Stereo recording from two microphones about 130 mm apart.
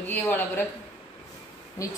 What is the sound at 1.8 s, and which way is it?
Speech, 25° left (ahead or behind).